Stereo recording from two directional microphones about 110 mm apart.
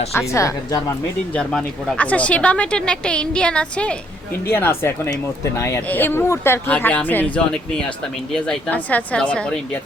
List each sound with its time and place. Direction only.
0.1 s speech: 25° left (ahead or behind)
1.4 s speech: 10° left (ahead or behind)
4.4 s speech: 20° left (ahead or behind)